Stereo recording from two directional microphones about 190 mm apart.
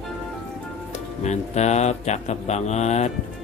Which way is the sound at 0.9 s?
35° left (ahead or behind).